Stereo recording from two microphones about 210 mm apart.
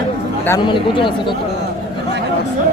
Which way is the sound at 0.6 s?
25° left (ahead or behind).